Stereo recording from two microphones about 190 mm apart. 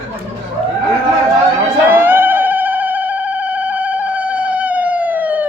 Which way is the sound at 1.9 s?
10° right (ahead or behind).